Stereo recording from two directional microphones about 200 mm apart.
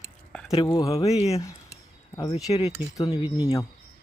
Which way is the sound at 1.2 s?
30° left (ahead or behind).